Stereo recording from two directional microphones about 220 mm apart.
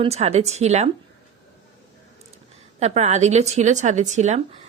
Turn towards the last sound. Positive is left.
turn(degrees=-30)  # may be behind; listen again after turning